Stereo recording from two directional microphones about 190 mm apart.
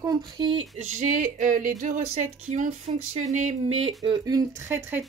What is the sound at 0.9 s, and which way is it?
Speech, 45° right (ahead or behind).